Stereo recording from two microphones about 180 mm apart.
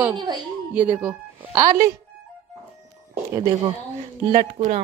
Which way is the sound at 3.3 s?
20° right (ahead or behind).